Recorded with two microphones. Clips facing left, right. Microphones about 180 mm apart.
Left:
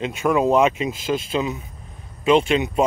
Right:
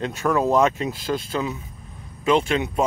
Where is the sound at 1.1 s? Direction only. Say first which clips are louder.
Left 4 dB; 20° left (ahead or behind).